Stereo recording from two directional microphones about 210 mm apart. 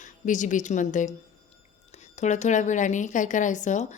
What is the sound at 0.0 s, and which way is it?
A woman's voice, 35° left (ahead or behind).